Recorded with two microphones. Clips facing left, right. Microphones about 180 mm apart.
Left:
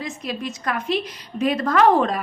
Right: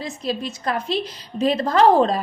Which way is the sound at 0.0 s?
30° right (ahead or behind).